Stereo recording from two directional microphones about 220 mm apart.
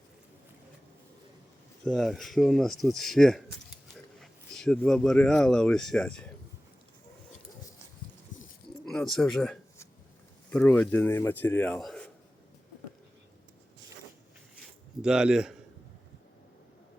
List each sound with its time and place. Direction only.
1.8 s speech: centre (ahead or behind)
8.3 s a sound: 35° left (ahead or behind)
8.9 s a man's voice: centre (ahead or behind)
15.0 s speech: 5° right (ahead or behind)